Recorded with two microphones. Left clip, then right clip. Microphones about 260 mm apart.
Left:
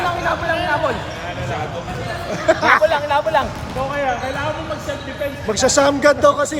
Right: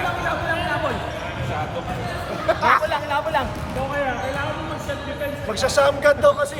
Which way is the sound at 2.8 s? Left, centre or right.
Left.